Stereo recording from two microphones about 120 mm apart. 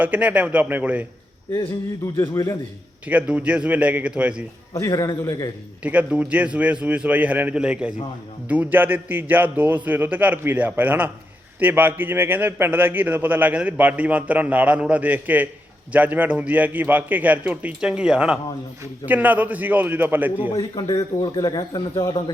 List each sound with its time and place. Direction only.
0.0 s a man's voice: 15° right (ahead or behind)
2.1 s a man's voice: 30° left (ahead or behind)
3.1 s a man's voice: 10° right (ahead or behind)
4.7 s a man's voice: 25° left (ahead or behind)
5.8 s a man's voice: 10° right (ahead or behind)
20.6 s a man's voice: 30° left (ahead or behind)